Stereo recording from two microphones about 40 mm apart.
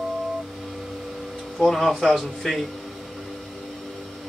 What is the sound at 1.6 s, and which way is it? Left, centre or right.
A man's voice, centre.